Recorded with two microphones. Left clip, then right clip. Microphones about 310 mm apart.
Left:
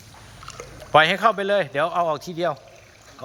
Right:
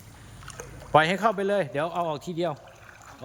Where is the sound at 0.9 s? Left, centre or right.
Centre.